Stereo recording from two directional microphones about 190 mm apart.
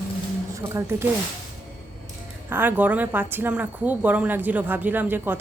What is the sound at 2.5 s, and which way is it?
A woman's voice, 10° right (ahead or behind).